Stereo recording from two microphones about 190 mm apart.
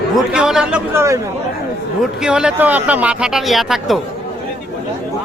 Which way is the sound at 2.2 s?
5° right (ahead or behind).